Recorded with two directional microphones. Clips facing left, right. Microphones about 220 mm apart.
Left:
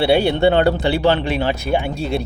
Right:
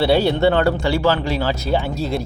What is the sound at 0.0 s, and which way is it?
Speech, 15° left (ahead or behind).